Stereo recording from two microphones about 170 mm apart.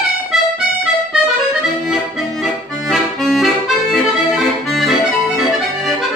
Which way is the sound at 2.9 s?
Centre (ahead or behind).